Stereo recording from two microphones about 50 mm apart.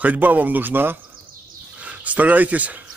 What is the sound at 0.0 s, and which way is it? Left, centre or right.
Speech, right.